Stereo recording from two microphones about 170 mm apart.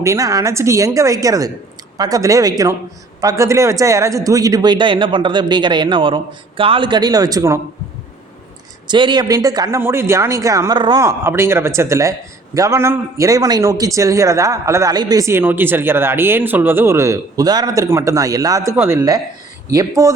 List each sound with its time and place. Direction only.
0.0 s a man's voice: 20° right (ahead or behind)
8.9 s a man's voice: 25° right (ahead or behind)